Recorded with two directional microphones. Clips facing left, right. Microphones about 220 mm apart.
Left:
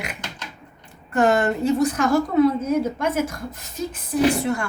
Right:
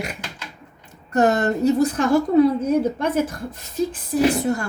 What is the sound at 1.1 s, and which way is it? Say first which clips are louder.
Speech: right 1 dB; 40° right (ahead or behind).